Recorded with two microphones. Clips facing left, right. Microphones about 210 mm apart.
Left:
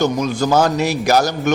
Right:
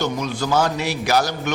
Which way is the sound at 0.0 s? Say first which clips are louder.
Left 6 dB; 45° left (ahead or behind).